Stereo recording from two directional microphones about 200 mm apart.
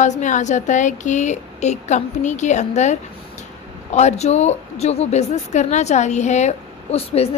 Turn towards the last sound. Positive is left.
turn(degrees=30)  # may be behind; listen again after turning